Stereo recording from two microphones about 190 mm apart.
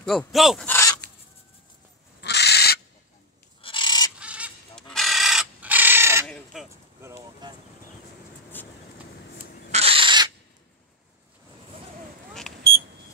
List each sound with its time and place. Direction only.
0.0 s speech: centre (ahead or behind)
0.7 s a sound: 10° left (ahead or behind)
2.2 s bird: 60° left (ahead or behind)
3.6 s bird: 25° left (ahead or behind)
4.2 s a sound: 5° right (ahead or behind)
4.7 s bird: centre (ahead or behind)
6.2 s a sound: centre (ahead or behind)
7.0 s boat: 15° right (ahead or behind)
8.5 s vehicle: 10° left (ahead or behind)
9.7 s owl: 30° right (ahead or behind)